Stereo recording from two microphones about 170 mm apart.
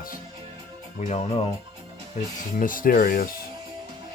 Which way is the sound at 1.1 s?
40° left (ahead or behind).